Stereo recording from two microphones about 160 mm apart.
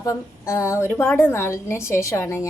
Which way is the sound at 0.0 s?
20° left (ahead or behind).